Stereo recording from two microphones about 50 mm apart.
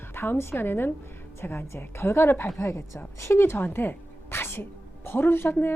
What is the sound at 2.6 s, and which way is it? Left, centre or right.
A woman's voice, left.